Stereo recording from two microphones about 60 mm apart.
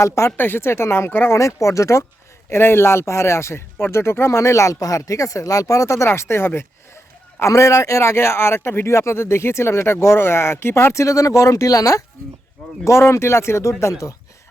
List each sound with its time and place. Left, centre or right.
0.3 s speech: left
1.3 s speech: left
2.5 s speech: left
6.1 s speech: left
7.3 s speech: left
11.0 s speech: left
12.8 s speech: left